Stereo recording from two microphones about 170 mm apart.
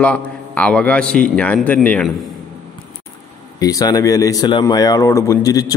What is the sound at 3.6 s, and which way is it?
Speech, 20° left (ahead or behind).